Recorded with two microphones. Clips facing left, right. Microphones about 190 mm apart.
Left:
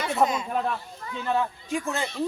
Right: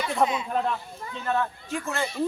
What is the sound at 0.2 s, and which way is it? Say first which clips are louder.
Speech: left 1 dB; 5° left (ahead or behind).